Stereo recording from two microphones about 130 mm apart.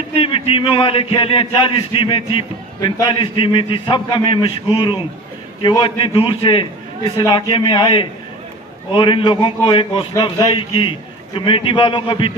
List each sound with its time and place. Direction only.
0.2 s a man's voice: 45° left (ahead or behind)